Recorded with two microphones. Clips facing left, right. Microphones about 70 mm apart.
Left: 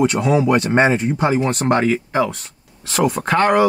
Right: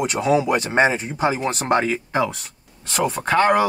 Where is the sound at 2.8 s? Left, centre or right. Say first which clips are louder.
Left 3 dB; centre.